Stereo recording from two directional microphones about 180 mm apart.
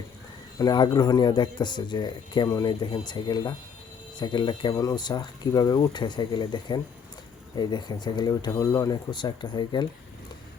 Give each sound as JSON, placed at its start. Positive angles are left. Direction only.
{"t": 0.6, "sound": "speech", "side_deg": 25}